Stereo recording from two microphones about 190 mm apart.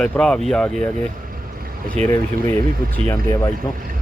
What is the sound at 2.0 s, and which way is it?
Speech, 35° right (ahead or behind).